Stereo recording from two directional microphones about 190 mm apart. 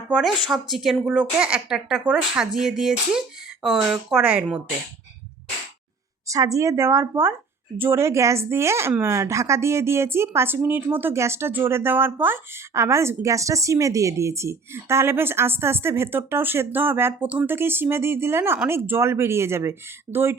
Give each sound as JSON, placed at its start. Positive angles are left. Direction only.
{"t": 0.2, "sound": "speech", "side_deg": 0}
{"t": 6.2, "sound": "speech", "side_deg": -15}